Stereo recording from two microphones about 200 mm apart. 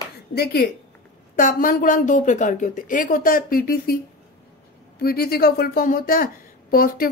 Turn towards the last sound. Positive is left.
turn(degrees=45)  # may be behind; listen again after turning